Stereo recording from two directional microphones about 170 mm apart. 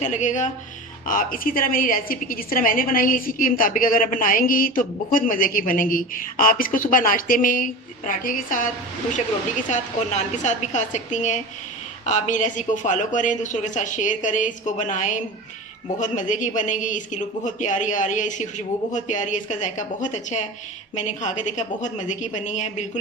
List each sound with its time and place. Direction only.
0.0 s a woman's voice: 45° left (ahead or behind)